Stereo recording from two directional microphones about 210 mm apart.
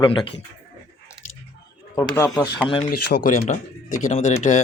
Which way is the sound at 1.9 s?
15° left (ahead or behind).